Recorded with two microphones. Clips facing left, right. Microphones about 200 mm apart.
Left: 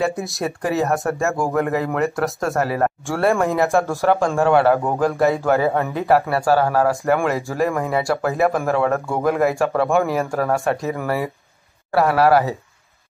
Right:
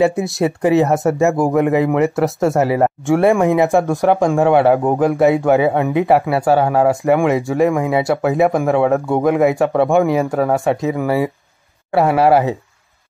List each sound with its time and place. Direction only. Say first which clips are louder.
0.4 s speech: right 8 dB; 20° right (ahead or behind)